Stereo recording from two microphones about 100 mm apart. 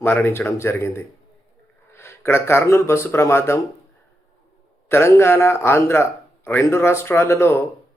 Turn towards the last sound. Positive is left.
turn(degrees=25)  # may be behind; listen again after turning